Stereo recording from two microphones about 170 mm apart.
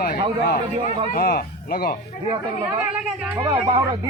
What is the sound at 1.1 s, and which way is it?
Speech, 65° left (ahead or behind).